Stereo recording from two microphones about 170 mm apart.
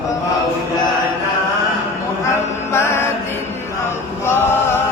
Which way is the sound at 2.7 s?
15° left (ahead or behind).